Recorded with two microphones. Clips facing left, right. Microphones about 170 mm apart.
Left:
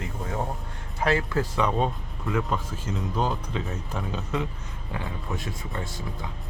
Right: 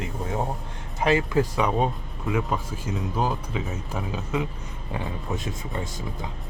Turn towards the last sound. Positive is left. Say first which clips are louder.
# right 2 dB
turn(degrees=-20)  # may be behind; listen again after turning